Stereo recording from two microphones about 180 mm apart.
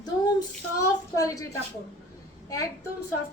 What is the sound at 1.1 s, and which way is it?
Speech, 20° left (ahead or behind).